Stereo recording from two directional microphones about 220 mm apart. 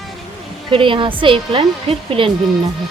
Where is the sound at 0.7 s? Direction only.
20° right (ahead or behind).